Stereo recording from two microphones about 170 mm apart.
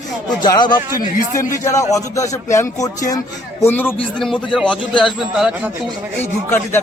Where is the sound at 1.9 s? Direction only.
20° left (ahead or behind); by 5.5 s centre (ahead or behind).